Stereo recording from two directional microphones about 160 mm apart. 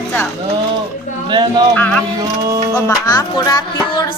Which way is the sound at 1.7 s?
10° left (ahead or behind).